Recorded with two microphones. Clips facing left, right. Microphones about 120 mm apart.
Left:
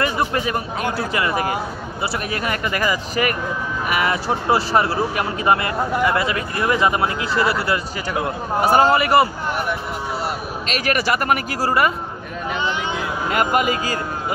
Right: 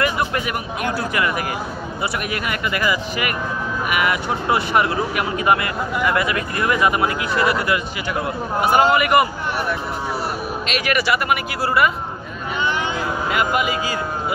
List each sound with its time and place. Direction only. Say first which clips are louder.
0.0 s speech: left 1 dB; 30° left (ahead or behind)
10.7 s speech: even; 40° left (ahead or behind)
13.3 s speech: left 3 dB; 45° left (ahead or behind)